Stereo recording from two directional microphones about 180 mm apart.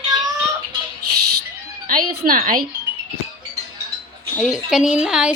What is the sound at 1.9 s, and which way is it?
Speech, 50° right (ahead or behind).